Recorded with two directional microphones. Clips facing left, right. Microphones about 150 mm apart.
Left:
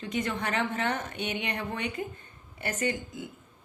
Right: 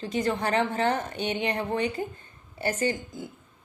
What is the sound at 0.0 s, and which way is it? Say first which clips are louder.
A woman's voice: right 4 dB; 35° right (ahead or behind).